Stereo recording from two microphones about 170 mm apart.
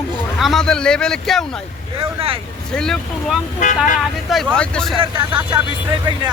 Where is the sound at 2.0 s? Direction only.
35° right (ahead or behind).